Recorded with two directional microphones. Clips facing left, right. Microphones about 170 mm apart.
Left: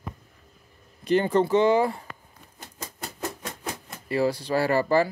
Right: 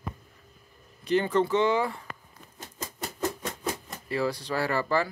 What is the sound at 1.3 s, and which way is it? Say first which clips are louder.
Speech: left 5 dB; 35° left (ahead or behind).